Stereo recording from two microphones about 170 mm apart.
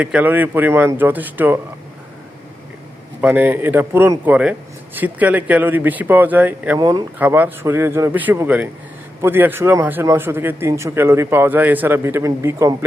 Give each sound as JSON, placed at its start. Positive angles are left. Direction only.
{"t": 0.0, "sound": "speech", "side_deg": -10}
{"t": 3.2, "sound": "speech", "side_deg": -10}
{"t": 6.7, "sound": "speech", "side_deg": -25}
{"t": 7.2, "sound": "speech", "side_deg": -10}